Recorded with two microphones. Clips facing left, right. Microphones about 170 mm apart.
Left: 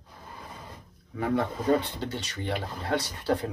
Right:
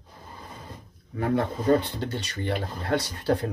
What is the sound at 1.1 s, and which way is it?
Speech, 50° right (ahead or behind).